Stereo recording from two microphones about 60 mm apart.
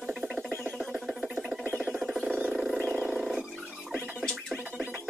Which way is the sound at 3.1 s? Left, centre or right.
Centre.